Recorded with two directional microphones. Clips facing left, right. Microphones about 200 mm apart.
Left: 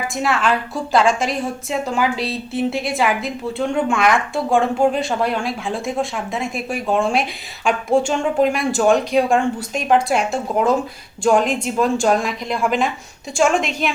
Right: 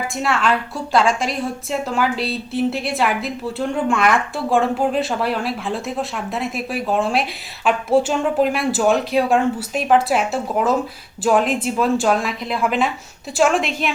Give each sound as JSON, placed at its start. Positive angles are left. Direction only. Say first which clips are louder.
{"t": 0.2, "sound": "a woman's voice", "louder": "left 1 dB", "side_deg": 0}